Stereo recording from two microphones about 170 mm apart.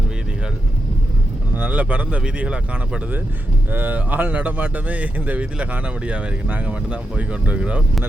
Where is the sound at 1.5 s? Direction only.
10° right (ahead or behind).